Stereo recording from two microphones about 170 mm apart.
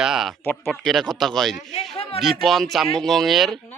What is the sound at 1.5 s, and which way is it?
Speech, 40° left (ahead or behind).